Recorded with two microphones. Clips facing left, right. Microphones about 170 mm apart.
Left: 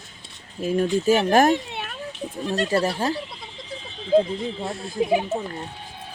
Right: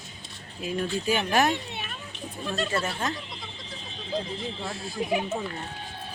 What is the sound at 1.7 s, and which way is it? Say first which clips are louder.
Children playing: left 4 dB; 90° left.